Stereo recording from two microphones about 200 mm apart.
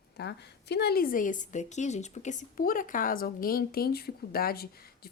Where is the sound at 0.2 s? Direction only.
55° left (ahead or behind).